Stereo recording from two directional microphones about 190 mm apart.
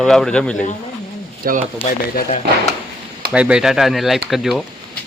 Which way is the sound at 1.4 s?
50° right (ahead or behind).